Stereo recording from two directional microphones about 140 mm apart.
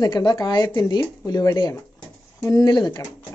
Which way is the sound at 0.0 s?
30° left (ahead or behind).